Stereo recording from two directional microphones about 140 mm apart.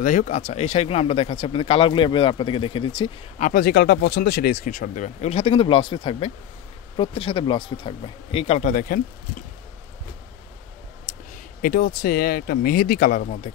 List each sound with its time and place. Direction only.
0.0 s a man's voice: 70° left (ahead or behind)
0.4 s speech: 50° left (ahead or behind)
3.3 s a man's voice: 75° left (ahead or behind)
11.6 s speech: 90° left; by 13.5 s 75° left (ahead or behind)